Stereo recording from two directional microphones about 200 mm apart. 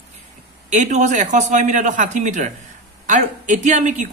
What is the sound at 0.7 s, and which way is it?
Speech, 35° right (ahead or behind).